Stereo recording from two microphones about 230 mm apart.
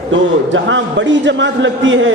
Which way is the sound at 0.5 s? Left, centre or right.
Right.